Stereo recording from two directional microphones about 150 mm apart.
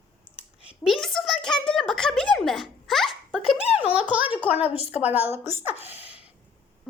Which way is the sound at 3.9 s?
10° right (ahead or behind).